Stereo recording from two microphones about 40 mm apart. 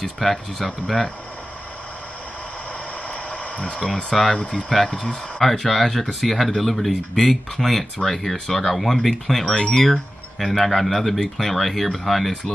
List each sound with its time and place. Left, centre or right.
0.0 s speech: centre
3.5 s speech: left
3.8 s speech: centre
4.4 s speech: left
4.9 s speech: centre
5.5 s speech: centre